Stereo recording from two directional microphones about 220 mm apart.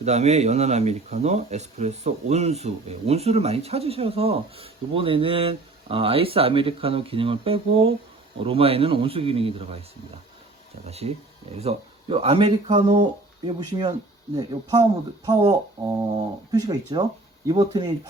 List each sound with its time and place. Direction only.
0.0 s speech: 30° right (ahead or behind)
10.8 s speech: 30° right (ahead or behind)